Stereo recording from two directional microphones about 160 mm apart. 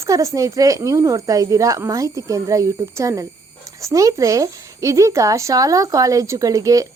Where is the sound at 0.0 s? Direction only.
20° right (ahead or behind).